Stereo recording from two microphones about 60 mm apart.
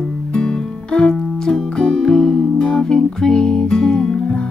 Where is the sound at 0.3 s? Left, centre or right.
Centre.